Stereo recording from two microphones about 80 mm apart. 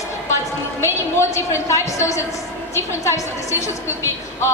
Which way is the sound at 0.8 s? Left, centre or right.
Left.